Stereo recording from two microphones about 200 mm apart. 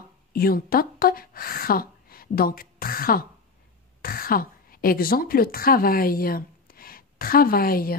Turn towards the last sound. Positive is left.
turn(degrees=45)  # may be behind; listen again after turning